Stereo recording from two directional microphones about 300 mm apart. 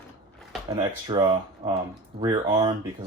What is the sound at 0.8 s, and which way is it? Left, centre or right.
Speech, centre.